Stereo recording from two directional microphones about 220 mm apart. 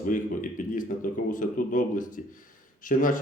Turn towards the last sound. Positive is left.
turn(degrees=35)  # may be behind; listen again after turning